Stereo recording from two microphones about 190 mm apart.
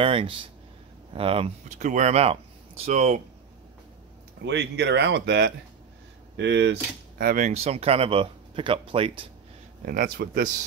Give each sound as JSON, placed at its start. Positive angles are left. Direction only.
{"t": 0.0, "sound": "speech", "side_deg": -30}
{"t": 4.4, "sound": "speech", "side_deg": -65}
{"t": 9.8, "sound": "speech", "side_deg": -50}